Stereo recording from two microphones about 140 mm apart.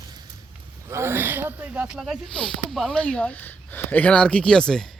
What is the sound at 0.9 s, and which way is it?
Speech, 20° right (ahead or behind).